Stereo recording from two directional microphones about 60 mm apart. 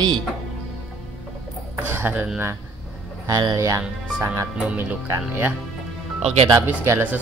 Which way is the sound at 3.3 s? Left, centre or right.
Right.